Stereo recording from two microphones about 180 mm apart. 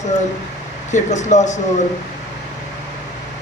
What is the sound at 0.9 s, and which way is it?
Speech, 40° left (ahead or behind).